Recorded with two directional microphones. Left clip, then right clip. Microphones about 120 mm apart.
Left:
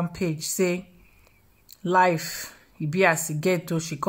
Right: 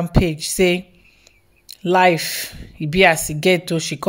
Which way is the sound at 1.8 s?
20° right (ahead or behind).